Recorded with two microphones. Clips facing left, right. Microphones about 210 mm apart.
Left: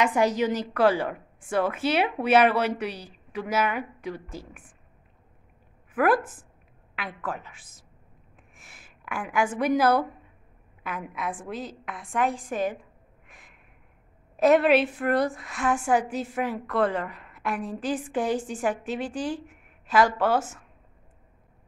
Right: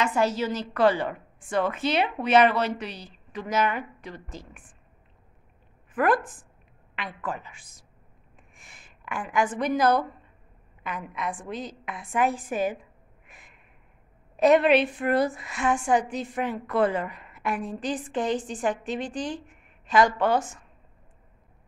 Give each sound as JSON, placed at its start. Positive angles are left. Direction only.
{"t": 0.0, "sound": "a woman's voice", "side_deg": 15}
{"t": 5.9, "sound": "a woman's voice", "side_deg": 5}
{"t": 13.3, "sound": "a sound", "side_deg": 0}
{"t": 14.3, "sound": "a woman's voice", "side_deg": 5}